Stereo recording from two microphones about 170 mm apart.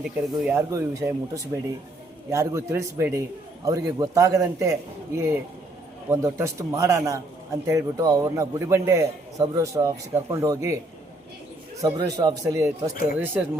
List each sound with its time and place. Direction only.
0.0 s a man's voice: 10° right (ahead or behind)
0.7 s a man's voice: 20° right (ahead or behind)
11.8 s speech: 20° right (ahead or behind)